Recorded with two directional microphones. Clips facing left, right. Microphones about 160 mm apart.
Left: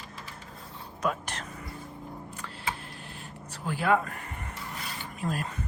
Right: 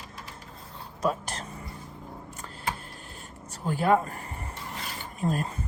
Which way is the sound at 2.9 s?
45° right (ahead or behind).